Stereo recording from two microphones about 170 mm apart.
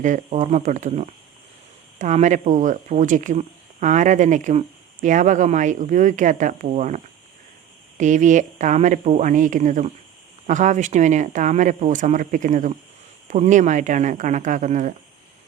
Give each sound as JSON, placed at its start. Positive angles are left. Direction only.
{"t": 0.0, "sound": "speech", "side_deg": -45}